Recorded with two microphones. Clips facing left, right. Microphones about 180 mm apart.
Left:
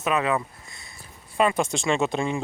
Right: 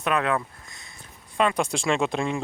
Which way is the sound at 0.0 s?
Centre (ahead or behind).